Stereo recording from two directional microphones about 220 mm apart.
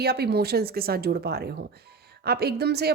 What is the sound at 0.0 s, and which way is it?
Speech, 45° right (ahead or behind).